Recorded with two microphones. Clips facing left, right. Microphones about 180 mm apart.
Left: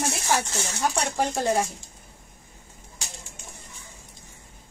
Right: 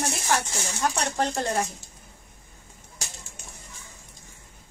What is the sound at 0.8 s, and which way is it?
Speech, 10° left (ahead or behind).